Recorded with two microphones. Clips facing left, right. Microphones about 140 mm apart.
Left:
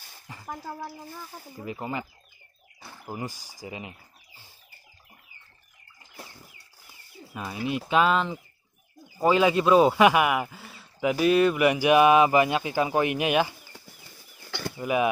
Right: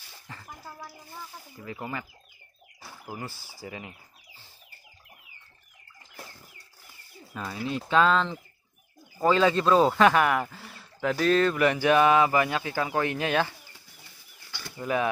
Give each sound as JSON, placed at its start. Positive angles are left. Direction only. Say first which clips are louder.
{"t": 0.3, "sound": "a sound", "louder": "even", "side_deg": 15}
{"t": 1.6, "sound": "speech", "louder": "left 3 dB", "side_deg": 20}
{"t": 2.8, "sound": "a sound", "louder": "left 2 dB", "side_deg": -5}
{"t": 3.2, "sound": "speech", "louder": "left 3 dB", "side_deg": 15}
{"t": 7.3, "sound": "speech", "louder": "left 2 dB", "side_deg": 15}
{"t": 11.1, "sound": "speech", "louder": "left 2 dB", "side_deg": 10}
{"t": 14.8, "sound": "speech", "louder": "left 2 dB", "side_deg": 15}